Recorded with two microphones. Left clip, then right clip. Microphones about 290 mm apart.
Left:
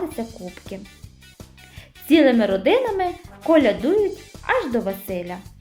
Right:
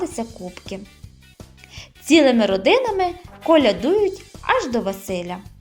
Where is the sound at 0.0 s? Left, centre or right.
Centre.